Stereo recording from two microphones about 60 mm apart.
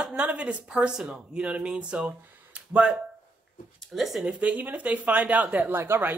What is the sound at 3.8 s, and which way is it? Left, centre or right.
Speech, centre.